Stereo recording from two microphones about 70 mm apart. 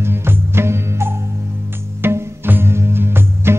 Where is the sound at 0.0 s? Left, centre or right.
Right.